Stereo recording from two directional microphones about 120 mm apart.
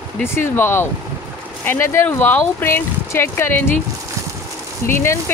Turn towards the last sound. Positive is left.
turn(degrees=20)  # may be behind; listen again after turning